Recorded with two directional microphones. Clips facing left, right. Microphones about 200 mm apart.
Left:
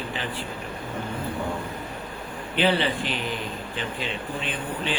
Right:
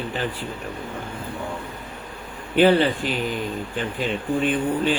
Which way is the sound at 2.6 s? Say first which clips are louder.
Right 6 dB; 45° right (ahead or behind).